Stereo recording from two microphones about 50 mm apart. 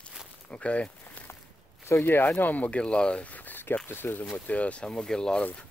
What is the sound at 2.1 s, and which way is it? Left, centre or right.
Speech, left.